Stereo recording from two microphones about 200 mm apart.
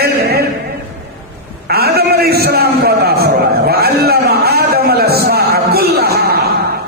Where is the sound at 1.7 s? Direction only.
50° right (ahead or behind).